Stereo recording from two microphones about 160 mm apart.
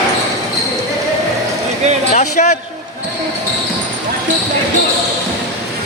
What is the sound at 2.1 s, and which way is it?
Speech, 45° left (ahead or behind).